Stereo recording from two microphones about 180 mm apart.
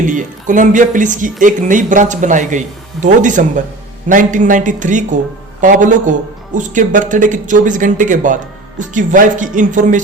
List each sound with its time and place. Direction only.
0.0 s speech: 45° right (ahead or behind)